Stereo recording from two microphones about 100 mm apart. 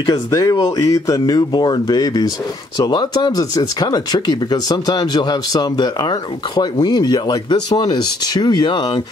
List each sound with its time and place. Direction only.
0.0 s speech: 40° left (ahead or behind)